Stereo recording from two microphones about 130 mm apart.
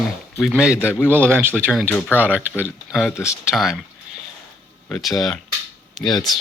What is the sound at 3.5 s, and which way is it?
Speech, centre (ahead or behind).